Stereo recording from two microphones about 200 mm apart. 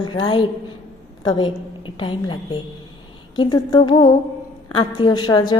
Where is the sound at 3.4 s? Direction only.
20° left (ahead or behind).